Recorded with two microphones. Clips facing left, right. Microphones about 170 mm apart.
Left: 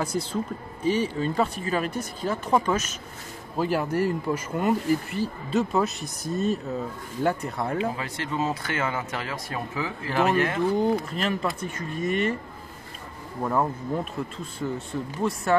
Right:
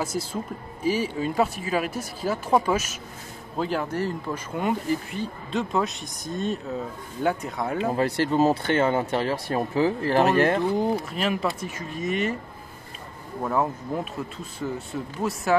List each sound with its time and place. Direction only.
0.0 s speech: 5° right (ahead or behind)
3.5 s speech: 5° left (ahead or behind)
7.9 s speech: 40° right (ahead or behind)
10.8 s speech: 5° right (ahead or behind)
13.4 s speech: centre (ahead or behind)